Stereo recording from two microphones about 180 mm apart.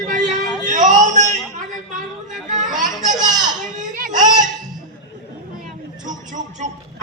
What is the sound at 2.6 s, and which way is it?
Children playing, 45° right (ahead or behind).